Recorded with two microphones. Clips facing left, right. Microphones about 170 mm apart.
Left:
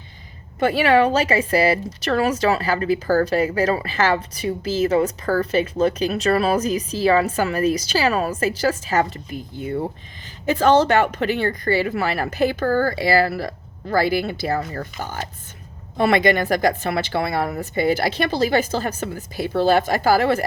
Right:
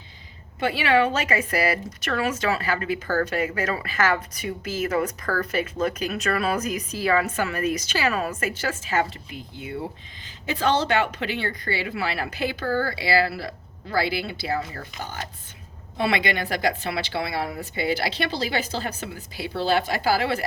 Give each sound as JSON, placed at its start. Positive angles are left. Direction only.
{"t": 0.6, "sound": "a woman's voice", "side_deg": 45}